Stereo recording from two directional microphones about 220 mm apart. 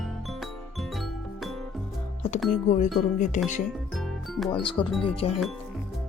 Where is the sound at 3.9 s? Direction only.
Centre (ahead or behind).